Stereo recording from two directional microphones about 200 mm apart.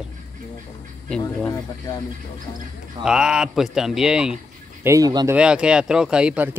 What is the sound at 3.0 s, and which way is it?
Speech, 5° right (ahead or behind).